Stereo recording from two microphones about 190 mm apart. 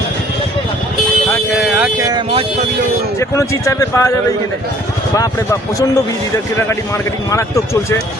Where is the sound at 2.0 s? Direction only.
25° right (ahead or behind).